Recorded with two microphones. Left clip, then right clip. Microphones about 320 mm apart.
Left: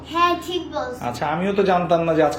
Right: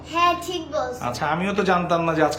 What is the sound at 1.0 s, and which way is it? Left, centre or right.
A man's voice, centre.